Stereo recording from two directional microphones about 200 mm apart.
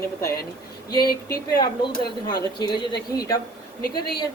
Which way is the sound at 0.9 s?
50° left (ahead or behind).